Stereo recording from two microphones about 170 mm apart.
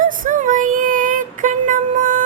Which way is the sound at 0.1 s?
50° right (ahead or behind).